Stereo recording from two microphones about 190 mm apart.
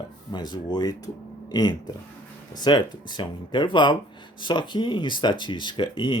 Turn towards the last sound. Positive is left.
turn(degrees=25)  # may be behind; listen again after turning